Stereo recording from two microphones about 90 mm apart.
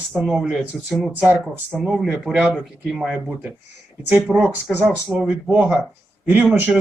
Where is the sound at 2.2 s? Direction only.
10° right (ahead or behind).